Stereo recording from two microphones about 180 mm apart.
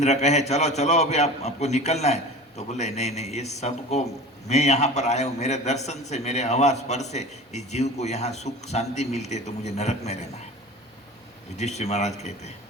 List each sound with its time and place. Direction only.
0.0 s a man's voice: 40° left (ahead or behind)
11.5 s a man's voice: 40° left (ahead or behind)